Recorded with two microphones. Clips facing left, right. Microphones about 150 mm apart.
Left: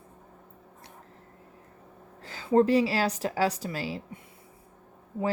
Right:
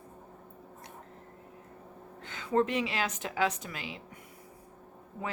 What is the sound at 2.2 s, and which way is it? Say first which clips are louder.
A woman's voice: left 6 dB; 35° left (ahead or behind).